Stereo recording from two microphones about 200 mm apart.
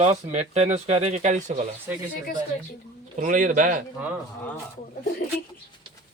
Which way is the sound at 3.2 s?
40° right (ahead or behind).